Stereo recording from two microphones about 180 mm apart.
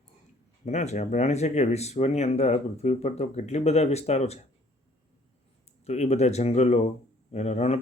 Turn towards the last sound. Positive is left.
turn(degrees=35)  # may be behind; listen again after turning